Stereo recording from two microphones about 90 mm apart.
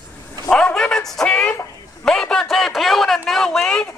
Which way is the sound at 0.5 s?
10° left (ahead or behind).